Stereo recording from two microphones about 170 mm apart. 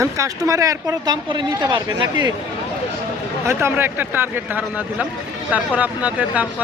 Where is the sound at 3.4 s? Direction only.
15° right (ahead or behind).